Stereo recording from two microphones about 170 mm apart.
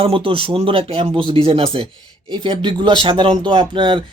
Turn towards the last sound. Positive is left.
turn(degrees=-30)  # may be behind; listen again after turning